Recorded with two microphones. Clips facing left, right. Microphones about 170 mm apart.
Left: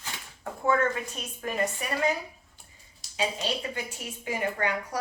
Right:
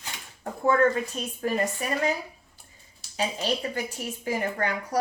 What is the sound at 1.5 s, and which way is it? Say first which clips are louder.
Speech: right 1 dB; 35° right (ahead or behind).